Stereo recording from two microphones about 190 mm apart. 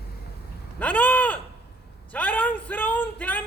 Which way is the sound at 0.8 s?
10° left (ahead or behind).